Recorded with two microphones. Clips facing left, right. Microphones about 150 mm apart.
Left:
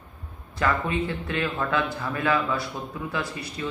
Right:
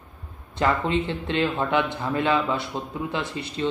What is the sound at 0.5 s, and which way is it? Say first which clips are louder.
Speech: right 3 dB; 25° right (ahead or behind).